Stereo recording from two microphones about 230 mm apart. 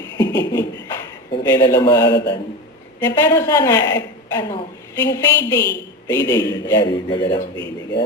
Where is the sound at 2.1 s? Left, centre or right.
Left.